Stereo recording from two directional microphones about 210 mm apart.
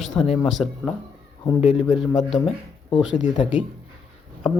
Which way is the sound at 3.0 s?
5° right (ahead or behind).